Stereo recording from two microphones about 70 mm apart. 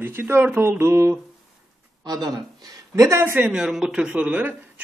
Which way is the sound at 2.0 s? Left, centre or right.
Right.